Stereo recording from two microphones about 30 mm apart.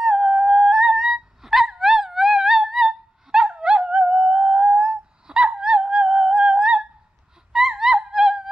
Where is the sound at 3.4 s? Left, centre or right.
Right.